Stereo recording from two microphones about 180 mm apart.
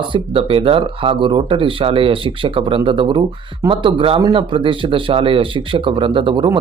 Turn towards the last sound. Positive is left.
turn(degrees=-25)  # may be behind; listen again after turning